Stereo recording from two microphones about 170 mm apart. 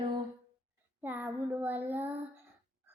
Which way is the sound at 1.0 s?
10° right (ahead or behind).